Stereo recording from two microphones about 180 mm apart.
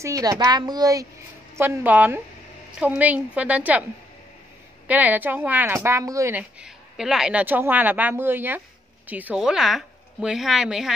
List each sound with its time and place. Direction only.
0.0 s a woman's voice: 20° right (ahead or behind)
4.8 s a woman's voice: 10° right (ahead or behind)
6.6 s a woman's voice: 5° right (ahead or behind)